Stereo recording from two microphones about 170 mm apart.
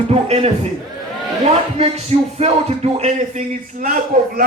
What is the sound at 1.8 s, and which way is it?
Music, 40° right (ahead or behind).